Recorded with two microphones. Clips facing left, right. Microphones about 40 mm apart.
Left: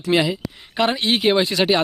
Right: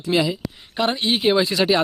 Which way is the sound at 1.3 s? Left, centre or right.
Left.